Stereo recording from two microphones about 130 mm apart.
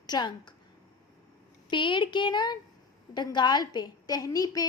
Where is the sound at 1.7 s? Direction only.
40° left (ahead or behind).